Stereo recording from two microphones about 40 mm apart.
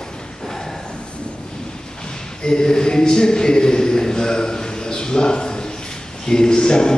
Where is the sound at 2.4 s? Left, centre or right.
Left.